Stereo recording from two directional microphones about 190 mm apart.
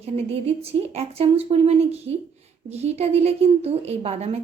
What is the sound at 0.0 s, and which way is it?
A woman's voice, 35° right (ahead or behind).